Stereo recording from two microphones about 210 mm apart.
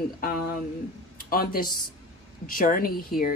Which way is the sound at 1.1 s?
45° left (ahead or behind).